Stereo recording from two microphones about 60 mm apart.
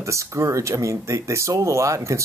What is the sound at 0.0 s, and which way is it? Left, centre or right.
Speech, right.